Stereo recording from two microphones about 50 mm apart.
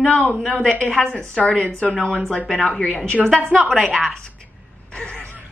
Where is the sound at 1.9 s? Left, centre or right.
Centre.